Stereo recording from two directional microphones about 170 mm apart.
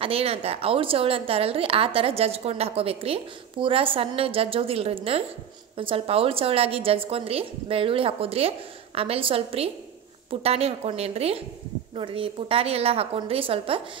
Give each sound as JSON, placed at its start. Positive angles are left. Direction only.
{"t": 0.0, "sound": "a woman's voice", "side_deg": -35}